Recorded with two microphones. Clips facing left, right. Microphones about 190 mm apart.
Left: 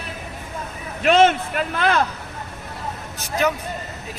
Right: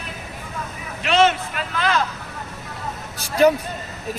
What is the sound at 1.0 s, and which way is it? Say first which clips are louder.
A man's voice: left 3 dB; 50° left (ahead or behind).